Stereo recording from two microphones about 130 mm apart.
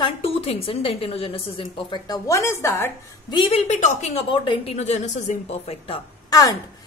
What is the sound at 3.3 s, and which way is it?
Speech, 40° left (ahead or behind).